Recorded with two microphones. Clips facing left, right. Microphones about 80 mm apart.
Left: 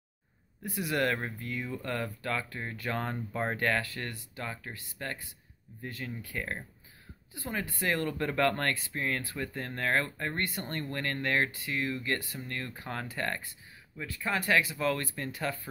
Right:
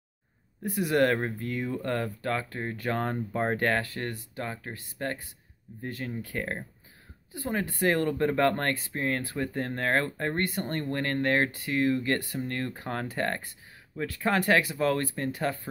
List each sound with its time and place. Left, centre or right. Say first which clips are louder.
0.6 s speech: right 6 dB; right
13.9 s speech: right 6 dB; right